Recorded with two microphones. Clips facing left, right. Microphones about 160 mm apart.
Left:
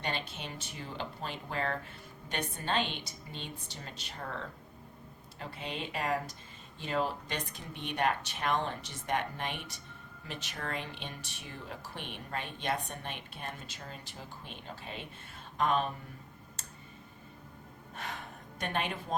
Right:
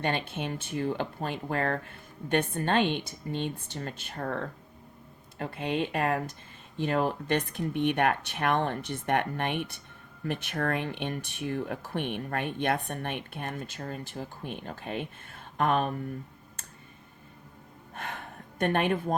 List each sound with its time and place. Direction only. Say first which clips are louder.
0.0 s a woman's voice: right 7 dB; 55° right (ahead or behind)
17.9 s gasp: right 3 dB; 55° right (ahead or behind)
18.6 s a woman's voice: right 9 dB; 55° right (ahead or behind)